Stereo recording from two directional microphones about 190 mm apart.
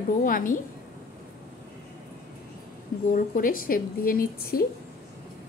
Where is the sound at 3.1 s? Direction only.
45° left (ahead or behind).